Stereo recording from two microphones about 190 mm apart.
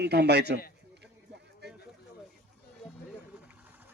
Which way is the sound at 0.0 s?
60° right (ahead or behind).